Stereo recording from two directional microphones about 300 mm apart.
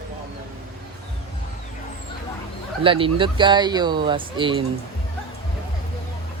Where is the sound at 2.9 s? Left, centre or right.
Centre.